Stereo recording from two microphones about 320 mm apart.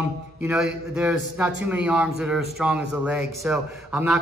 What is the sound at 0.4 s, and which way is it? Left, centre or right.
Mantra, centre.